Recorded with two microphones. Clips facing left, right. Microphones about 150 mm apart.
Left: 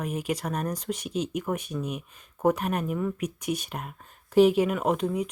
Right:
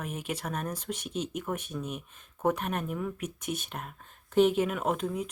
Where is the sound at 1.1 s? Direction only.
10° left (ahead or behind).